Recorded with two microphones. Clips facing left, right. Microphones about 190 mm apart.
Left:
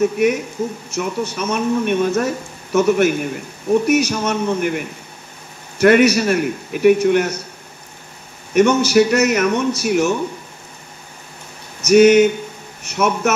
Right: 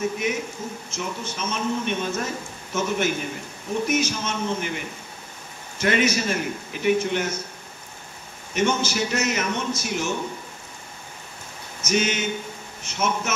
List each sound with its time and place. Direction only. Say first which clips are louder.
0.0 s a man's voice: left 9 dB; 65° left (ahead or behind)
8.5 s speech: left 11 dB; 65° left (ahead or behind)
11.8 s speech: left 15 dB; 65° left (ahead or behind)